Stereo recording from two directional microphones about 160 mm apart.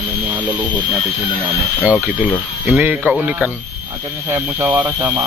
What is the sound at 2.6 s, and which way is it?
Speech, 10° right (ahead or behind).